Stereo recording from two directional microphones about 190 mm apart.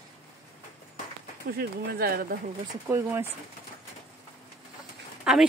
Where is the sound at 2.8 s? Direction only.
15° right (ahead or behind).